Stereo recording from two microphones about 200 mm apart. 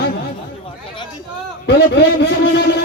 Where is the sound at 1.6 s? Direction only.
60° left (ahead or behind).